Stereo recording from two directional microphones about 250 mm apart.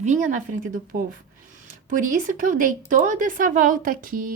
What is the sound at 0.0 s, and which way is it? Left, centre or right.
A woman's voice, right.